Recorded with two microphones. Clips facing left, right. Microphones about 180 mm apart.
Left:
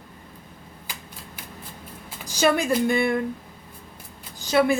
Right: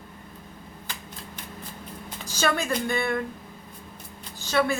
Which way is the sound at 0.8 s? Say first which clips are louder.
Even; 10° left (ahead or behind).